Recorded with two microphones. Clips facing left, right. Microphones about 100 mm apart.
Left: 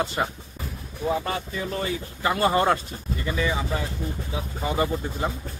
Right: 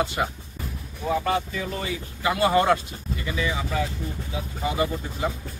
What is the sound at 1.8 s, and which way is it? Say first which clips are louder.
Speech: left 2 dB; 40° left (ahead or behind).